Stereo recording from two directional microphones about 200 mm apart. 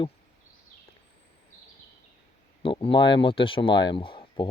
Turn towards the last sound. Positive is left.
turn(degrees=25)  # may be behind; listen again after turning